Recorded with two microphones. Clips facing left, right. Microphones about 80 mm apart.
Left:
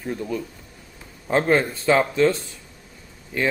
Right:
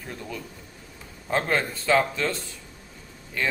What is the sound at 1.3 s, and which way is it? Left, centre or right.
A man's voice, left.